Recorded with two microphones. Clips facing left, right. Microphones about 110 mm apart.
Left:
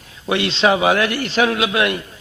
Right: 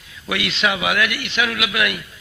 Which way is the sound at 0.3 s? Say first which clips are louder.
Left 6 dB; 30° left (ahead or behind).